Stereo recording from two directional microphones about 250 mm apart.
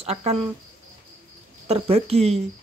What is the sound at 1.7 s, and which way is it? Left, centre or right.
Speech, right.